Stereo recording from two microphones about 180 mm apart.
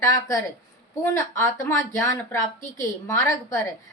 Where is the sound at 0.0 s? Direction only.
15° left (ahead or behind).